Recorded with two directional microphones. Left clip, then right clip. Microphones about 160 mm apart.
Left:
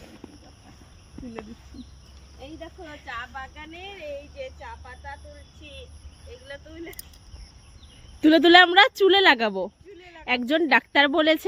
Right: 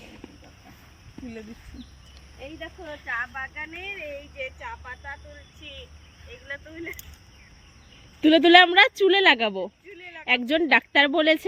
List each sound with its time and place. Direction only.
3.1 s speech: 40° left (ahead or behind)
4.4 s speech: 10° left (ahead or behind)
8.2 s speech: 10° left (ahead or behind)